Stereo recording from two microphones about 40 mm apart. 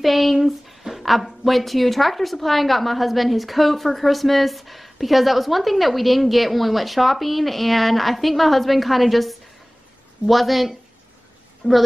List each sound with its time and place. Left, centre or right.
0.0 s speech: centre
11.6 s a woman's voice: right